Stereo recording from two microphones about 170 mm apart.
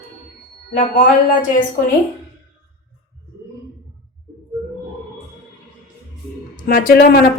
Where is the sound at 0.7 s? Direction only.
50° left (ahead or behind).